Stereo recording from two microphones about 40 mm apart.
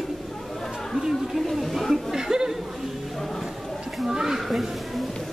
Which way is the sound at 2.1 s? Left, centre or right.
Centre.